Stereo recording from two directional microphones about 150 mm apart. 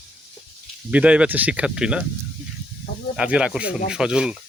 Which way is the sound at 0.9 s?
10° right (ahead or behind).